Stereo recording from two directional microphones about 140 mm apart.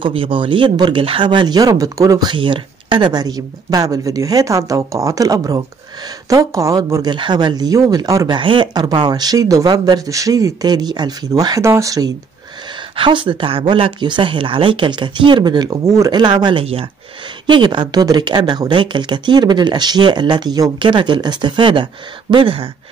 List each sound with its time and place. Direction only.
0.0 s speech: 40° right (ahead or behind)
8.4 s speech: 35° right (ahead or behind)
12.9 s speech: 40° right (ahead or behind)